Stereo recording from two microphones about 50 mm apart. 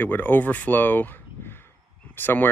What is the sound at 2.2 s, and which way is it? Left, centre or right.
Speech, left.